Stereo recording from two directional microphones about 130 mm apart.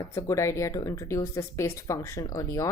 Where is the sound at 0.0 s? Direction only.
25° left (ahead or behind).